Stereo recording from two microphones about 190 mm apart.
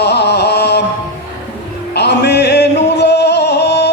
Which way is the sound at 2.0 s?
60° left (ahead or behind).